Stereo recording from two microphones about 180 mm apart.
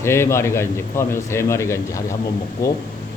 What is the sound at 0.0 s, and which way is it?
A man's voice, 15° left (ahead or behind).